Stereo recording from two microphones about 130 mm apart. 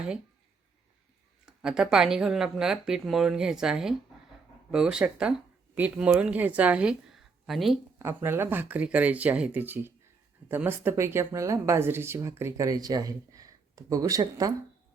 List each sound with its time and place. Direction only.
1.5 s a woman's voice: 5° right (ahead or behind)
7.9 s speech: 20° right (ahead or behind)